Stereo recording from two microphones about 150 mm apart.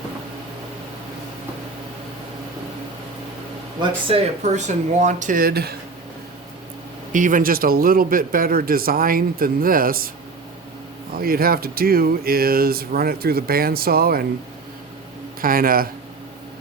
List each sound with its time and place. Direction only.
4.1 s speech: 45° right (ahead or behind); by 5.7 s 85° right
7.1 s speech: 60° right (ahead or behind)
11.2 s speech: 75° right (ahead or behind)
15.4 s speech: 70° right (ahead or behind)